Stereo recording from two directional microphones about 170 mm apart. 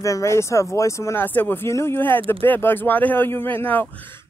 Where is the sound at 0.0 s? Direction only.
20° left (ahead or behind).